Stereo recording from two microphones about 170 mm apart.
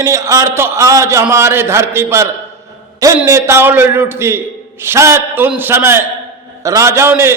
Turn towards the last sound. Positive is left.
turn(degrees=-15)  # may be behind; listen again after turning